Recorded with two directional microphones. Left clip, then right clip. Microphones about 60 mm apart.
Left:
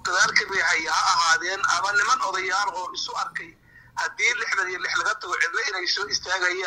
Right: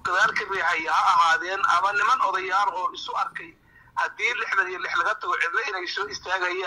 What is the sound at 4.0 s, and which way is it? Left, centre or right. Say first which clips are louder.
Speech: left 1 dB; left.